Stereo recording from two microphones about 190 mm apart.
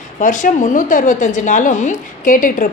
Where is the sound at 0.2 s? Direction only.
45° left (ahead or behind).